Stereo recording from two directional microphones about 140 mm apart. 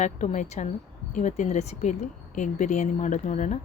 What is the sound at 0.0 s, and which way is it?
A woman's voice, 60° left (ahead or behind).